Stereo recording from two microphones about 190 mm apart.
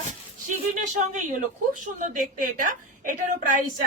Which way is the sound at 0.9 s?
40° right (ahead or behind).